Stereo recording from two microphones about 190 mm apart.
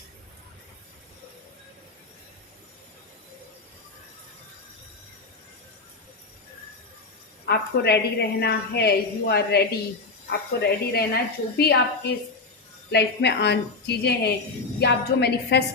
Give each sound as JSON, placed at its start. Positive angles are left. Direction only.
{"t": 7.4, "sound": "a woman's voice", "side_deg": 60}
{"t": 12.9, "sound": "a woman's voice", "side_deg": 65}